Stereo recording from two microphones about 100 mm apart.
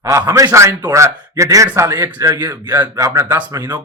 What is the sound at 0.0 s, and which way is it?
Speech, 35° right (ahead or behind).